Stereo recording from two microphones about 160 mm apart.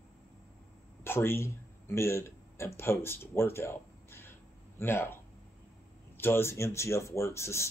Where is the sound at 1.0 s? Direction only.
15° left (ahead or behind).